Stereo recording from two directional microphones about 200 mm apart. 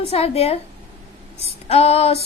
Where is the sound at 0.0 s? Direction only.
30° left (ahead or behind).